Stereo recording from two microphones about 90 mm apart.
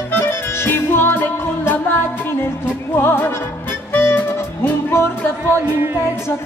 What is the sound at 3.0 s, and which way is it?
Music, 25° left (ahead or behind).